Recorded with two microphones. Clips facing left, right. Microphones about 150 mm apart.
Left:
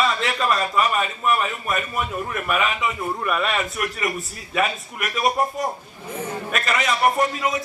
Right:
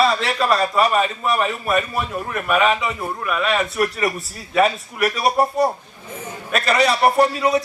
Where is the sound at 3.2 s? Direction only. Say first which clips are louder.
Right 3 dB; centre (ahead or behind).